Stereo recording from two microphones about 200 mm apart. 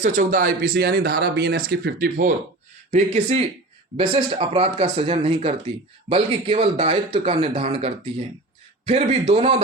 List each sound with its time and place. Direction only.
0.0 s speech: 40° right (ahead or behind)
2.9 s a man's voice: 30° right (ahead or behind)